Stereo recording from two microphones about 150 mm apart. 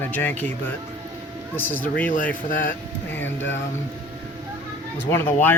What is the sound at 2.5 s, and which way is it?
Speech, 65° left (ahead or behind).